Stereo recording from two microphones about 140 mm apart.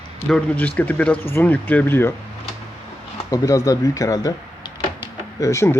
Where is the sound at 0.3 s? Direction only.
5° left (ahead or behind).